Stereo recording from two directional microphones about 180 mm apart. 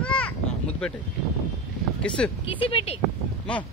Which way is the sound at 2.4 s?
30° left (ahead or behind).